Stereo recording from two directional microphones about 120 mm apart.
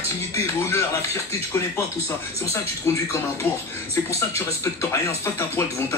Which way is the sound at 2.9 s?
20° left (ahead or behind).